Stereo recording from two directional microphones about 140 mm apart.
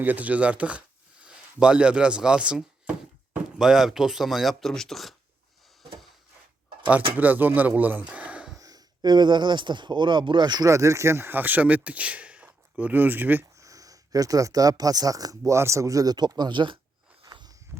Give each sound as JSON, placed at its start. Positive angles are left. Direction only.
{"t": 0.0, "sound": "speech", "side_deg": -10}
{"t": 7.2, "sound": "speech", "side_deg": -10}
{"t": 8.5, "sound": "speech", "side_deg": -25}
{"t": 13.7, "sound": "speech", "side_deg": -25}
{"t": 17.2, "sound": "a sound", "side_deg": -30}